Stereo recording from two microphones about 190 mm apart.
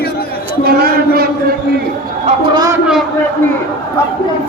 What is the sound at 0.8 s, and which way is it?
Speech, 55° right (ahead or behind).